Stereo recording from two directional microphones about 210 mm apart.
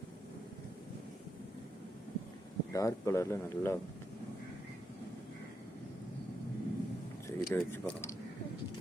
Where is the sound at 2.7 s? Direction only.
15° left (ahead or behind).